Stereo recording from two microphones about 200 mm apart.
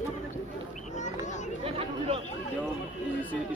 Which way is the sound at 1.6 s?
30° right (ahead or behind).